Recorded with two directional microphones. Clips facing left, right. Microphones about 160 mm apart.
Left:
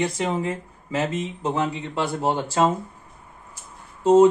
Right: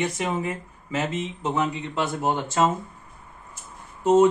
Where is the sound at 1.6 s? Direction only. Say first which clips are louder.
Left 1 dB; 35° left (ahead or behind).